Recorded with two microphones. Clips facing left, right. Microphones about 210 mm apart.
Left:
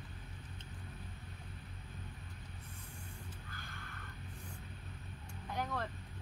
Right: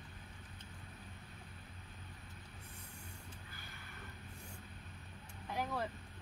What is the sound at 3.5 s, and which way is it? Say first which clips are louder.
Mechanisms: left 4 dB; 10° right (ahead or behind).